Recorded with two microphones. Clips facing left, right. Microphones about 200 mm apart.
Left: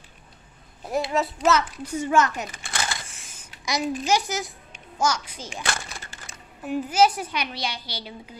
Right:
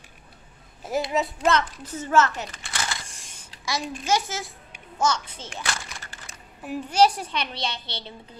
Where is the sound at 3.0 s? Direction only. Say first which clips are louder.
Even; 5° left (ahead or behind).